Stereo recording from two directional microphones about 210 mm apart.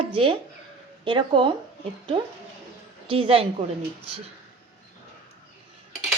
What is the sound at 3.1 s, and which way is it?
Speech, 25° right (ahead or behind).